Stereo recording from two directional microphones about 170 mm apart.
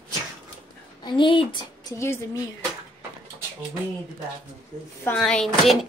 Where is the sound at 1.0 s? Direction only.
30° left (ahead or behind).